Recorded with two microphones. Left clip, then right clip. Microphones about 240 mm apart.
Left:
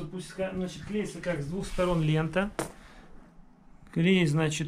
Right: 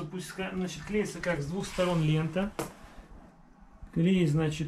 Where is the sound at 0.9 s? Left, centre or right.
Right.